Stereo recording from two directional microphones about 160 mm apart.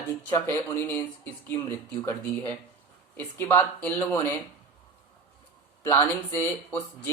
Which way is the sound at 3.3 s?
10° left (ahead or behind).